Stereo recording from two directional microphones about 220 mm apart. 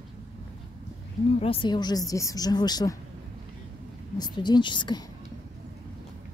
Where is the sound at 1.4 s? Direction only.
25° left (ahead or behind).